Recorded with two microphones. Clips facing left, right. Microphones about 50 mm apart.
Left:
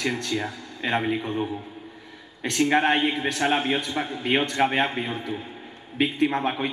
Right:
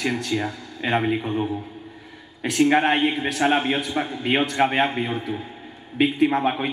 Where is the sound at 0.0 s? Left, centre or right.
Centre.